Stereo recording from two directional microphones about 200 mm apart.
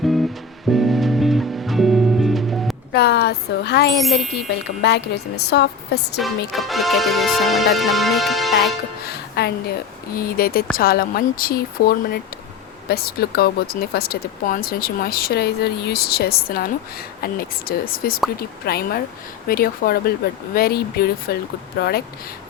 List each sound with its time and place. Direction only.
0.0 s music: centre (ahead or behind)
2.9 s speech: 55° left (ahead or behind)
4.0 s music: centre (ahead or behind)
4.4 s speech: 55° left (ahead or behind)
6.1 s music: centre (ahead or behind)
9.0 s music: 55° left (ahead or behind)
10.2 s speech: 50° left (ahead or behind)
17.7 s speech: 45° left (ahead or behind)